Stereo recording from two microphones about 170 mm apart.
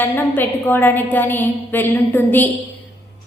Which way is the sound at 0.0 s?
10° left (ahead or behind).